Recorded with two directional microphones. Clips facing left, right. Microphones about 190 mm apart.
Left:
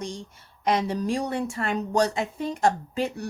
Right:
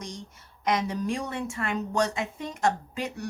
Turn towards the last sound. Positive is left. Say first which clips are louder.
# left 5 dB
turn(degrees=30)  # may be behind; listen again after turning